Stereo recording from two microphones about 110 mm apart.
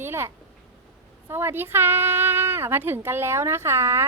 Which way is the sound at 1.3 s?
20° right (ahead or behind).